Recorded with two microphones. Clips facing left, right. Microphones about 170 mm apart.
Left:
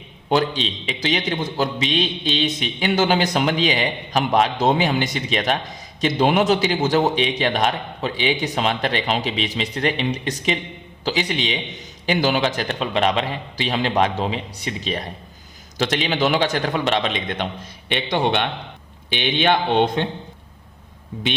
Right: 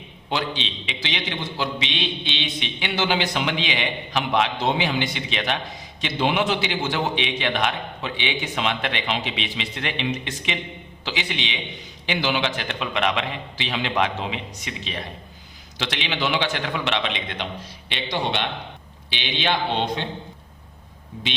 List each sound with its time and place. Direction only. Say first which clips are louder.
0.3 s a man's voice: left 7 dB; 45° left (ahead or behind)